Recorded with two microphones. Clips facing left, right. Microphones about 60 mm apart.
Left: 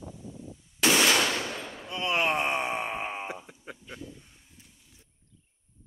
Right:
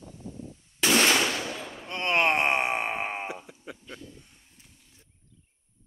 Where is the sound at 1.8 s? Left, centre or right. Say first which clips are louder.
Right 3 dB; right.